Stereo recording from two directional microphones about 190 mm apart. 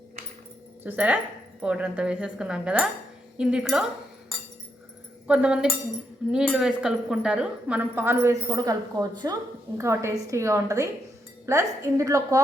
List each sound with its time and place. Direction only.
0.9 s a woman's voice: 10° right (ahead or behind)
5.3 s a woman's voice: 5° right (ahead or behind)